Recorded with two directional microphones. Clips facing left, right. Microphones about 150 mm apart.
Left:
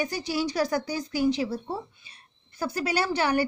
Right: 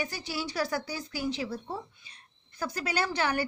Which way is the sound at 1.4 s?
35° left (ahead or behind).